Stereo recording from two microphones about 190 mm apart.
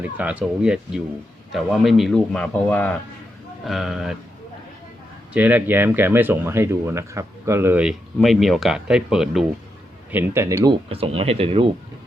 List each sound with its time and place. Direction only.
0.0 s a man's voice: 5° right (ahead or behind)
5.3 s speech: 10° right (ahead or behind)
10.8 s speech: 30° right (ahead or behind)